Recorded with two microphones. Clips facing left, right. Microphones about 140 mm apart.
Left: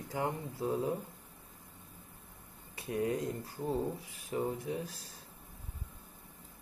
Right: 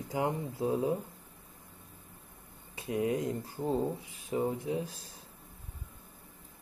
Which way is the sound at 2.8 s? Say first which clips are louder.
Right 3 dB; 20° right (ahead or behind).